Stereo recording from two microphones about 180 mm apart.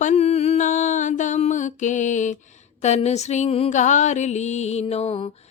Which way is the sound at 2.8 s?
40° left (ahead or behind).